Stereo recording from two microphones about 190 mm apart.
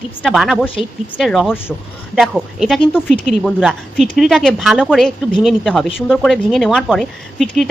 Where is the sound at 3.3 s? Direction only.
Centre (ahead or behind).